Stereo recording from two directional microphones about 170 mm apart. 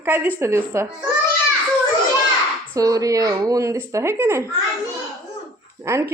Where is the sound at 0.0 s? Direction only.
10° right (ahead or behind).